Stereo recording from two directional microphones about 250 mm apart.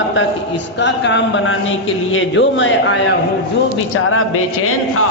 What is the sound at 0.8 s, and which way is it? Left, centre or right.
A man's voice, left.